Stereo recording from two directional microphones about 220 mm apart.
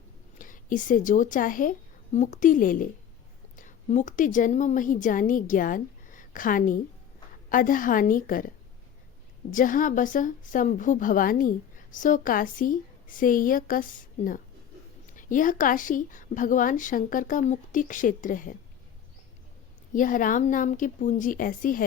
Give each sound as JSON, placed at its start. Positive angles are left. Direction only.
{"t": 0.3, "sound": "a woman's voice", "side_deg": 35}
{"t": 19.9, "sound": "a woman's voice", "side_deg": 35}